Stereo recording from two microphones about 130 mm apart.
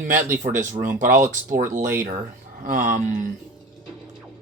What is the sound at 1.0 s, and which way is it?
Speech, 85° right.